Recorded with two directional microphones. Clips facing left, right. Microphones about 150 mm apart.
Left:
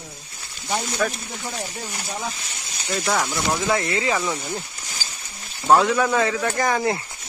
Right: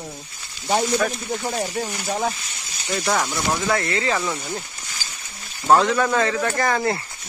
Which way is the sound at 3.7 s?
15° left (ahead or behind).